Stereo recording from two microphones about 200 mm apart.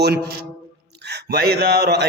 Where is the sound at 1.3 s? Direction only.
55° right (ahead or behind).